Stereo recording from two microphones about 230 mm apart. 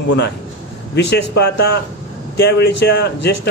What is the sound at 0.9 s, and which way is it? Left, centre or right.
Speech, left.